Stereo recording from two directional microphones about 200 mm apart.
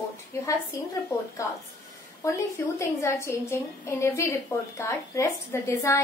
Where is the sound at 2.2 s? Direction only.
15° left (ahead or behind).